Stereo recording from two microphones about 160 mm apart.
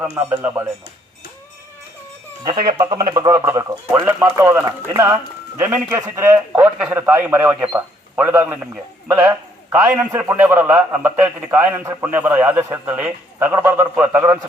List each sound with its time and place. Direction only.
0.0 s a man's voice: 10° right (ahead or behind)
3.2 s speech: 20° right (ahead or behind)
4.4 s a man's voice: 15° right (ahead or behind)